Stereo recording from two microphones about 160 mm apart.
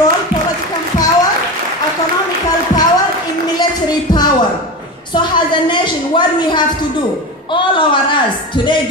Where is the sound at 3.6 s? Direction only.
25° left (ahead or behind).